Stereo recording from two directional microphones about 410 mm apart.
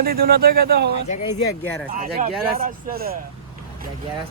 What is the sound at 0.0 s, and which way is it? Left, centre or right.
Speech, right.